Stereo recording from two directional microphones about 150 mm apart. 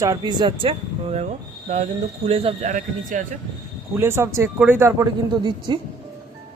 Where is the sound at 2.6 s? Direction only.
60° right (ahead or behind).